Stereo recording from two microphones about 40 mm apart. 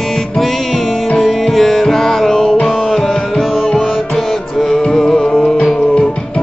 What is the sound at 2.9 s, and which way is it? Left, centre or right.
Music, centre.